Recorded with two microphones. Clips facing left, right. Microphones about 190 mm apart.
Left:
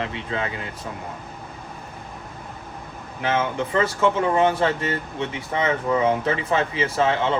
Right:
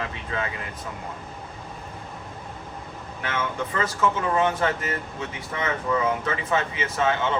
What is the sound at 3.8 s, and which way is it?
Speech, 30° left (ahead or behind).